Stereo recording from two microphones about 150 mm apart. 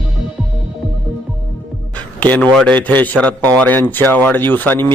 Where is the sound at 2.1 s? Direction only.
10° left (ahead or behind).